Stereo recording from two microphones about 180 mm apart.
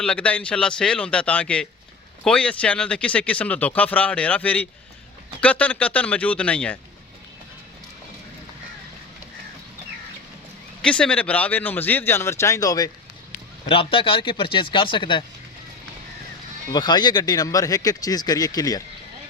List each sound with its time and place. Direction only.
0.0 s a man's voice: 5° left (ahead or behind)
10.8 s speech: 5° left (ahead or behind); by 15.2 s 25° left (ahead or behind)
16.7 s speech: 25° left (ahead or behind)